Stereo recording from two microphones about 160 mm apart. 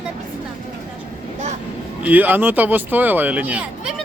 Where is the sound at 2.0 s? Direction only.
10° right (ahead or behind).